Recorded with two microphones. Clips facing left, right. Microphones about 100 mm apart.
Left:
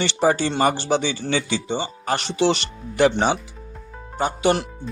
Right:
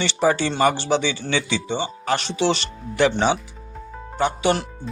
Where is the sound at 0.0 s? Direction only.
50° left (ahead or behind).